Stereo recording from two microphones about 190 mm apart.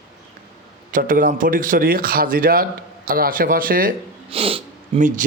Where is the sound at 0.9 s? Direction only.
45° right (ahead or behind).